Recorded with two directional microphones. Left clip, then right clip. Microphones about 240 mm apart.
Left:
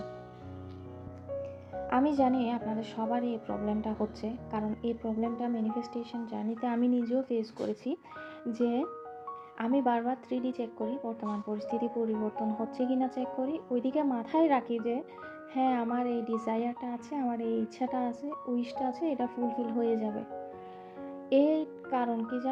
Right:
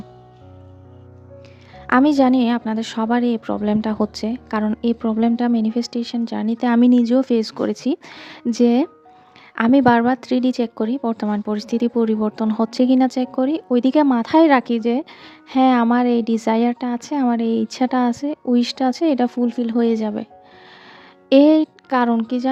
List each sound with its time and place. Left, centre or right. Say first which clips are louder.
1.9 s a woman's voice: right 12 dB; right
21.2 s speech: right 14 dB; right